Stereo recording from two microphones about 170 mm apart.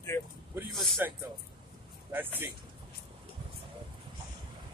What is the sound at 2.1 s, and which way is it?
Speech, 10° right (ahead or behind).